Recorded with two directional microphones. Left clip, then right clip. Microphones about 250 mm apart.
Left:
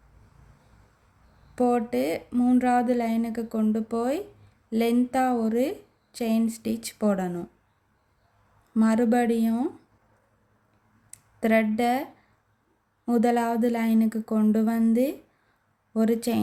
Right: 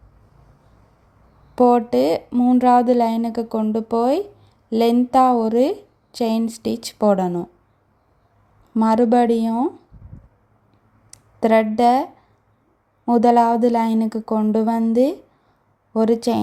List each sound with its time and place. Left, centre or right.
1.5 s speech: centre
8.7 s speech: centre
11.1 s speech: centre
13.1 s speech: centre